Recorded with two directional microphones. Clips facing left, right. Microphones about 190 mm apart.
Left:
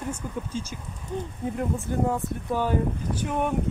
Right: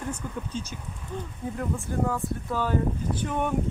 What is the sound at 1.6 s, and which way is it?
Speech, 20° left (ahead or behind).